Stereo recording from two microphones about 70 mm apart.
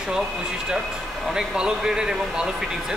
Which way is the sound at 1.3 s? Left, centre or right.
Centre.